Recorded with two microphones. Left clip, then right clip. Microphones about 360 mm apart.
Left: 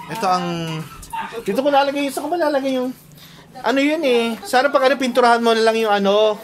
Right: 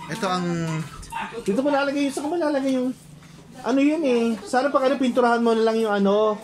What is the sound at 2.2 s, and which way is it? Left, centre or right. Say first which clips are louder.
Speech: left 3 dB; left.